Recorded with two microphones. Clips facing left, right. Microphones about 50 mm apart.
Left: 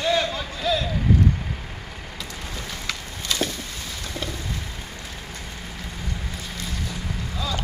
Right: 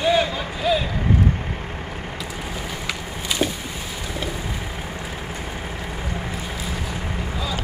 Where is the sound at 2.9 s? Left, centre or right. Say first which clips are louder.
Even; centre.